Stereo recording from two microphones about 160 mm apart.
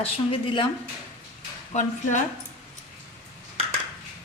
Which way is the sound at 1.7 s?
50° left (ahead or behind).